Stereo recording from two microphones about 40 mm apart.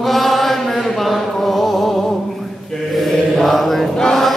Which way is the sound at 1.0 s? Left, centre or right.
Centre.